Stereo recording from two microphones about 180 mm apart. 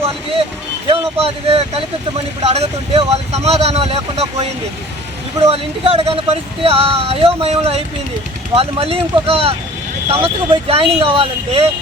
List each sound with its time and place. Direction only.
0.0 s speech: 35° right (ahead or behind)